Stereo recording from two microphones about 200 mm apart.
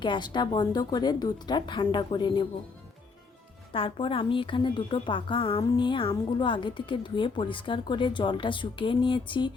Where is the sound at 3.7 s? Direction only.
25° left (ahead or behind).